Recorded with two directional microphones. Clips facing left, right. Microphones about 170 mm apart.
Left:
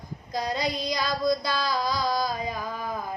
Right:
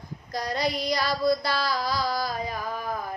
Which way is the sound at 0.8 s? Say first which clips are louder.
Right 1 dB; 15° left (ahead or behind).